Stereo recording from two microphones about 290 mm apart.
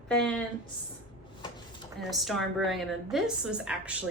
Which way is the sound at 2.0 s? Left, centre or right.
Centre.